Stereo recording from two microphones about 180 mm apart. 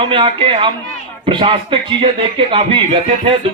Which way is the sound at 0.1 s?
30° right (ahead or behind).